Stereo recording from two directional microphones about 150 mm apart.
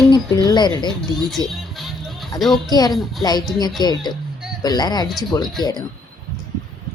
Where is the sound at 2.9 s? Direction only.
Centre (ahead or behind).